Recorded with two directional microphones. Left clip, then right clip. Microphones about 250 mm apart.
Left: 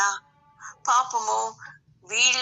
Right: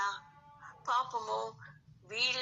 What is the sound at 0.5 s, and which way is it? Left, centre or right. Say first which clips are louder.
Meow: left 11 dB; left.